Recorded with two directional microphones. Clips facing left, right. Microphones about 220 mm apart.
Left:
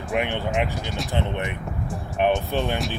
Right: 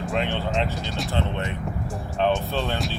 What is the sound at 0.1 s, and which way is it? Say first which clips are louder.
Speech: left 2 dB; 15° left (ahead or behind).